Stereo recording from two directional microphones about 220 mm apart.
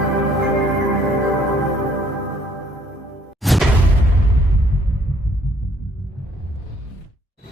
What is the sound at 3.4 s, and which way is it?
Music, centre (ahead or behind).